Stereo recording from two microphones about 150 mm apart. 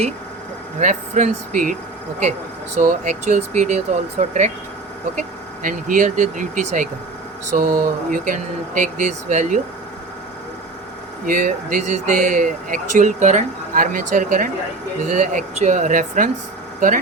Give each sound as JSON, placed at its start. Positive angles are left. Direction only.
{"t": 0.8, "sound": "speech", "side_deg": -55}
{"t": 2.7, "sound": "speech", "side_deg": -55}
{"t": 5.6, "sound": "speech", "side_deg": -60}
{"t": 11.3, "sound": "speech", "side_deg": -65}